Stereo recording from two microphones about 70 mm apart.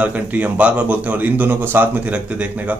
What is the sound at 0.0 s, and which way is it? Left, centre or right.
Speech, right.